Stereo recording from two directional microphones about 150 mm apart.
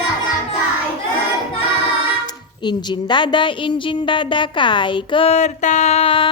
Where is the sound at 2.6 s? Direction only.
30° left (ahead or behind).